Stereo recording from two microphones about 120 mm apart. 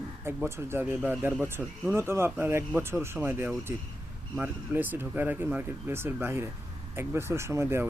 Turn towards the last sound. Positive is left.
turn(degrees=-20)  # may be behind; listen again after turning